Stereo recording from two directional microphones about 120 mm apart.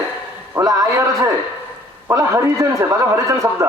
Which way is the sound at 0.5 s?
30° right (ahead or behind).